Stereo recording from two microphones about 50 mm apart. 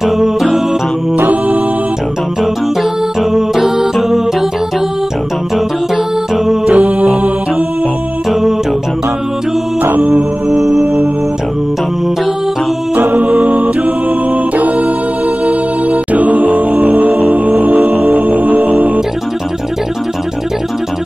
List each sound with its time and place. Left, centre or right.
0.0 s music: centre
1.1 s music: right
3.3 s music: centre
6.3 s music: centre
6.6 s music: right
8.3 s music: centre
10.0 s music: right
10.6 s music: centre
13.1 s music: right
15.4 s music: right